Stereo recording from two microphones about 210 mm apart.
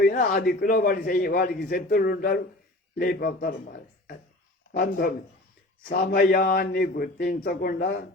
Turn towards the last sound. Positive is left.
turn(degrees=45)  # may be behind; listen again after turning